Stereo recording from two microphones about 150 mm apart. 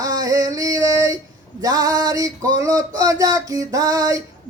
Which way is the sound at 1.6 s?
25° right (ahead or behind).